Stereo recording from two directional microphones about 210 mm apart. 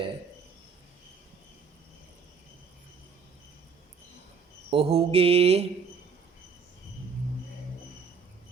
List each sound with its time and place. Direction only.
4.7 s mantra: 25° right (ahead or behind)